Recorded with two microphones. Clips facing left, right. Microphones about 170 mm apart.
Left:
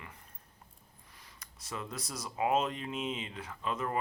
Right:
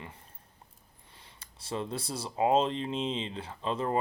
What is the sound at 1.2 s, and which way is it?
Speech, 30° right (ahead or behind).